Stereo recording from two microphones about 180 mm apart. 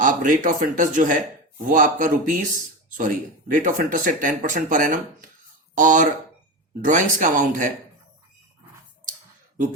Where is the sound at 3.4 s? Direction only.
45° right (ahead or behind).